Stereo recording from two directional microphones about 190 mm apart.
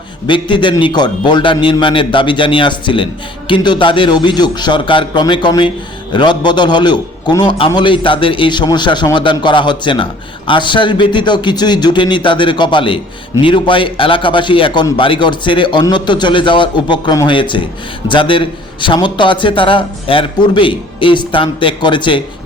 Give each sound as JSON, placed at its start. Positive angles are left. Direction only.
{"t": 0.3, "sound": "a man's voice", "side_deg": 25}